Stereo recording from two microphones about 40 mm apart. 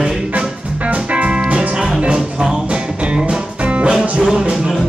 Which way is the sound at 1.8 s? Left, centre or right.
Centre.